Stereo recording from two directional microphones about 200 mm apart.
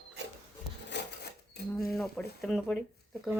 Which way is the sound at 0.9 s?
60° left (ahead or behind).